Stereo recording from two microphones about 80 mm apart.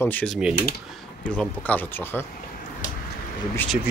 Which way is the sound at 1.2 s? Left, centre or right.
Centre.